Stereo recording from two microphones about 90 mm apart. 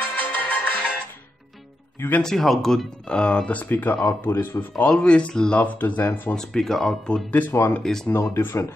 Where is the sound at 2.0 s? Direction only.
20° left (ahead or behind).